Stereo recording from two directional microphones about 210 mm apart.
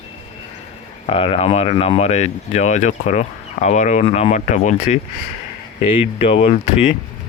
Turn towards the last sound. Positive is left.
turn(degrees=30)  # may be behind; listen again after turning